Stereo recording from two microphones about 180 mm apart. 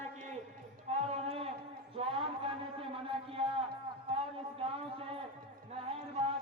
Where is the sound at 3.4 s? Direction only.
25° right (ahead or behind).